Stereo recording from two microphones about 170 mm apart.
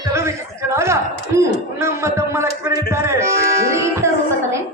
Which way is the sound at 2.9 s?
15° right (ahead or behind).